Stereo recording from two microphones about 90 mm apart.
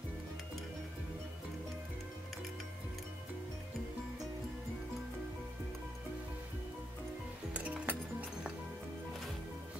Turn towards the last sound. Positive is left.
turn(degrees=-15)  # may be behind; listen again after turning